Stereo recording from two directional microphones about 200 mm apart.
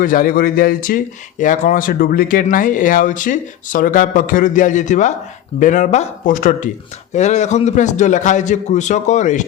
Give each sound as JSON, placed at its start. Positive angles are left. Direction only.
{"t": 0.0, "sound": "a man's voice", "side_deg": 45}